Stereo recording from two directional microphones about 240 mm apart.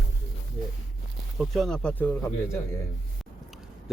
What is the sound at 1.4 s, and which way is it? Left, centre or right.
Speech, centre.